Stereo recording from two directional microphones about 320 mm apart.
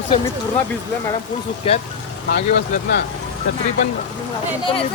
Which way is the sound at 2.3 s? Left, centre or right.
Left.